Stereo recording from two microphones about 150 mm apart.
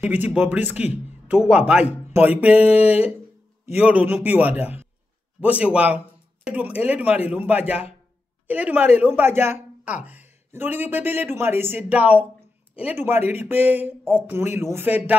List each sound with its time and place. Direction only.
0.0 s speech: 10° right (ahead or behind)
2.7 s a sound: 45° left (ahead or behind)
3.7 s speech: 10° right (ahead or behind)